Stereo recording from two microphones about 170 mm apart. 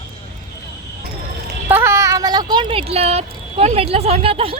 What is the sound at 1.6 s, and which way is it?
Speech, 15° right (ahead or behind).